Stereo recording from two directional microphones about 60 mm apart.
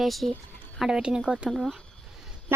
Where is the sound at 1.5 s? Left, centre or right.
Centre.